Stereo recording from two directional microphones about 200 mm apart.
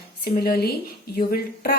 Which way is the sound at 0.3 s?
50° left (ahead or behind).